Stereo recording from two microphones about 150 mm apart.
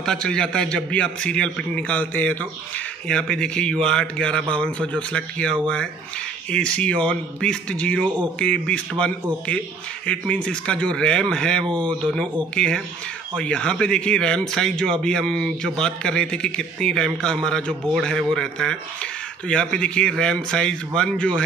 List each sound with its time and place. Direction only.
0.0 s a man's voice: 5° left (ahead or behind)
11.6 s speech: 30° right (ahead or behind)
12.0 s a man's voice: 5° left (ahead or behind)